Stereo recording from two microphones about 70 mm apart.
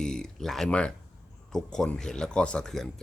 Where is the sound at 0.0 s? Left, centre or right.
Centre.